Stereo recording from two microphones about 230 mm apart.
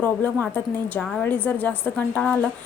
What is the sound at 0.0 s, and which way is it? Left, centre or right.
A woman's voice, centre.